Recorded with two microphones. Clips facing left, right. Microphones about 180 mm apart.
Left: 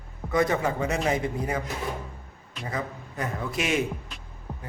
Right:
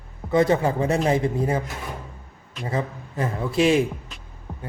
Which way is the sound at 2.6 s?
30° right (ahead or behind).